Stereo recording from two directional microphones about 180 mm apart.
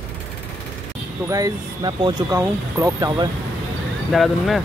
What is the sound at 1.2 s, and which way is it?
Speech, 20° right (ahead or behind).